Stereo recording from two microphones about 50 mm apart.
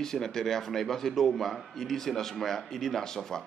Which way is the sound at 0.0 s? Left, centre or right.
Centre.